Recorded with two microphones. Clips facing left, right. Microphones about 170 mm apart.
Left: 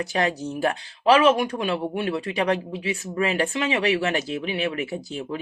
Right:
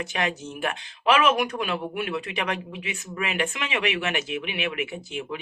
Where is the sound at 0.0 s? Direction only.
35° left (ahead or behind).